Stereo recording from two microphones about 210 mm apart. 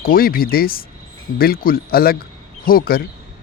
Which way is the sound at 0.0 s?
45° left (ahead or behind).